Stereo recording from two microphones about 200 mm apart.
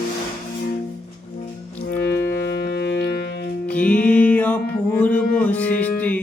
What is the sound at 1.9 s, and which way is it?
Music, 50° left (ahead or behind).